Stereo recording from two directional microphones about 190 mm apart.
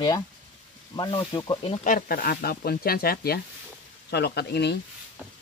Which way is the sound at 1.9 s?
45° left (ahead or behind).